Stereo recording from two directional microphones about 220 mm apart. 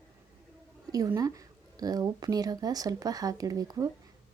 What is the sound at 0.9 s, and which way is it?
Speech, 15° right (ahead or behind).